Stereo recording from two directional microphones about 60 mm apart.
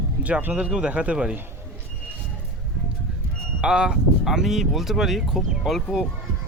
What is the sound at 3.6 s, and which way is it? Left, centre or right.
Speech, centre.